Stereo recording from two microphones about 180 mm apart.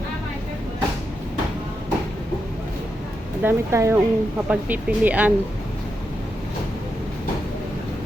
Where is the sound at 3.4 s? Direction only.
15° right (ahead or behind).